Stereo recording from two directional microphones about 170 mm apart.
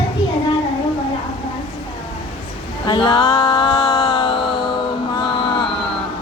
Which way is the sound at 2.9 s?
30° left (ahead or behind).